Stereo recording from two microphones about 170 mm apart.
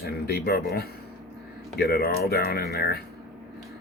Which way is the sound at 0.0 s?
65° left (ahead or behind).